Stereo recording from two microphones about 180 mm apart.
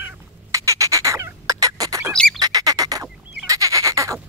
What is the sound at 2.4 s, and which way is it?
Bird, 20° right (ahead or behind).